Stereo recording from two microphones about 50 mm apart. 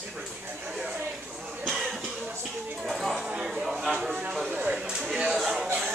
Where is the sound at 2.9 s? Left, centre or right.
Centre.